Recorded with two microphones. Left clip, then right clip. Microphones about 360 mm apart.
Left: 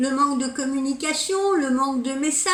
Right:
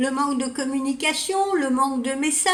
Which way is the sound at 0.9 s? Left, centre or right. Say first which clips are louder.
Right 1 dB; right.